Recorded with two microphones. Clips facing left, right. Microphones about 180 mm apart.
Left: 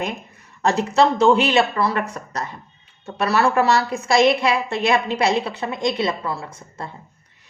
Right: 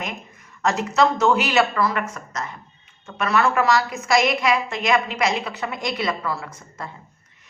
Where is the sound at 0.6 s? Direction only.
30° left (ahead or behind).